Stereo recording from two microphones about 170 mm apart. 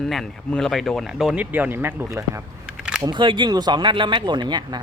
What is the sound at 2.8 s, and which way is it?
Single-lens reflex camera, 5° right (ahead or behind).